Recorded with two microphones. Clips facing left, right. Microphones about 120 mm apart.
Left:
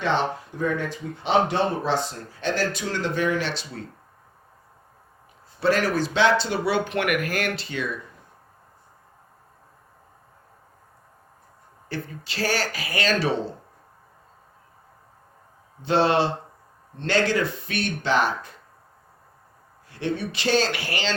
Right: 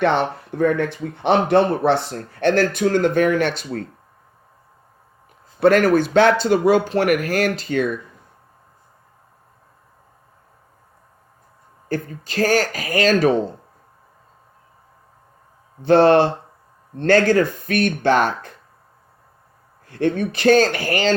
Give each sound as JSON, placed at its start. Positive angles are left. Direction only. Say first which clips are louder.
{"t": 0.0, "sound": "speech", "louder": "right 5 dB", "side_deg": -60}
{"t": 5.5, "sound": "speech", "louder": "right 8 dB", "side_deg": -55}
{"t": 11.9, "sound": "speech", "louder": "right 7 dB", "side_deg": -45}
{"t": 15.8, "sound": "speech", "louder": "right 8 dB", "side_deg": -55}
{"t": 19.9, "sound": "speech", "louder": "right 7 dB", "side_deg": -50}